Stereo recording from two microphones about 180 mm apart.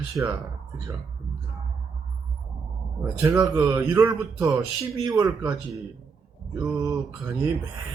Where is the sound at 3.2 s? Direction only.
15° right (ahead or behind).